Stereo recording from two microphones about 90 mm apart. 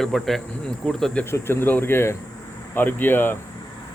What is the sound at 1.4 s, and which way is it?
Speech, 25° left (ahead or behind).